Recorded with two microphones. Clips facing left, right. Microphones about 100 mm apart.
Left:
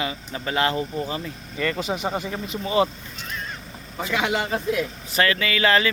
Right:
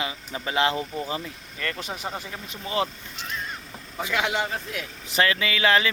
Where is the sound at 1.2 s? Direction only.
5° left (ahead or behind).